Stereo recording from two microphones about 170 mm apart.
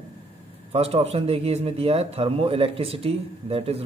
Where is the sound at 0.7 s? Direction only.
35° right (ahead or behind).